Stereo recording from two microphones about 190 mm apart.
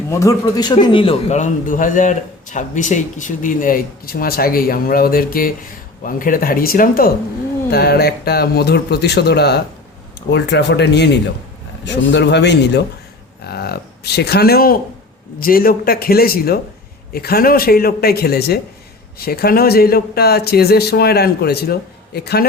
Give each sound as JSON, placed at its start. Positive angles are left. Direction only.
{"t": 0.1, "sound": "a man's voice", "side_deg": 15}
{"t": 13.5, "sound": "a sound", "side_deg": 55}
{"t": 15.4, "sound": "a man's voice", "side_deg": 50}